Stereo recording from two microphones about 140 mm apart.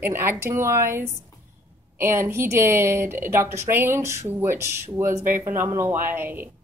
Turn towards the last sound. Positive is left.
turn(degrees=-15)  # may be behind; listen again after turning